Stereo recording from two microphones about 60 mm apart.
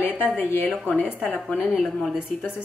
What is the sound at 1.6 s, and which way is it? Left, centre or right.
Speech, centre.